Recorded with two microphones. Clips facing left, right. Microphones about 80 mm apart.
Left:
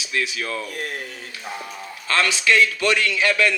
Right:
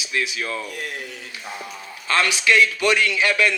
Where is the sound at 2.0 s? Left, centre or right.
Right.